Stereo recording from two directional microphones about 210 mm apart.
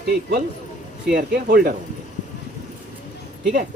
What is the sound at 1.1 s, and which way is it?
Speech, 50° right (ahead or behind).